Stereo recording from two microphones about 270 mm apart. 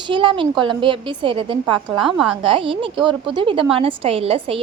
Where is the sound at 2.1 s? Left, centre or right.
Centre.